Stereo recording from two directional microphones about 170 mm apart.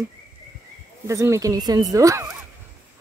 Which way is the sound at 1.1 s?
15° right (ahead or behind).